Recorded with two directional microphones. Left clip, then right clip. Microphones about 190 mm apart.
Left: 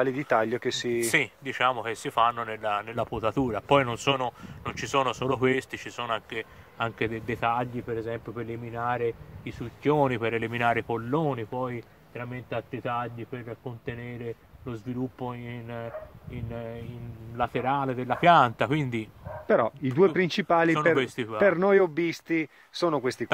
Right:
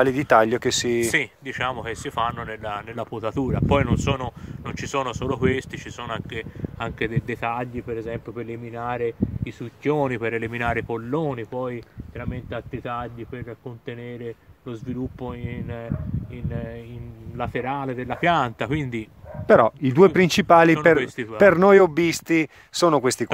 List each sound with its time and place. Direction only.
0.0 s speech: 50° right (ahead or behind)
1.0 s speech: 5° left (ahead or behind)
17.4 s speech: 5° left (ahead or behind)
19.4 s speech: 50° right (ahead or behind)
20.9 s speech: 5° left (ahead or behind)
21.4 s speech: 50° right (ahead or behind)